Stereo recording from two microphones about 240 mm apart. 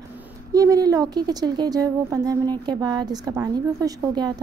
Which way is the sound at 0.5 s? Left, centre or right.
Centre.